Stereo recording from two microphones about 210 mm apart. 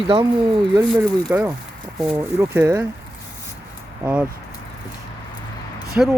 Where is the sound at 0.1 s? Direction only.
25° right (ahead or behind).